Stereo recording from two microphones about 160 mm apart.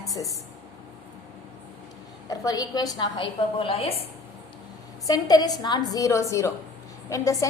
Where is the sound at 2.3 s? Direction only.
25° left (ahead or behind).